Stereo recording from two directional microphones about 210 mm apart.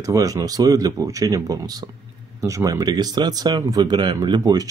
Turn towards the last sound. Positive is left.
turn(degrees=-20)  # may be behind; listen again after turning